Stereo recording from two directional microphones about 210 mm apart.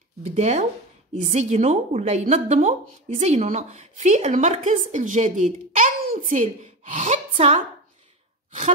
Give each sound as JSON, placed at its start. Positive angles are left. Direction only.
{"t": 0.3, "sound": "a woman's voice", "side_deg": -35}